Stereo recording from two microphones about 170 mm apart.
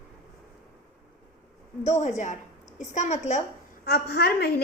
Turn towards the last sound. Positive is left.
turn(degrees=65)  # may be behind; listen again after turning